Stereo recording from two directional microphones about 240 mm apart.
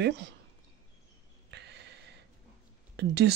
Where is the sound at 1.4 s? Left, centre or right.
Right.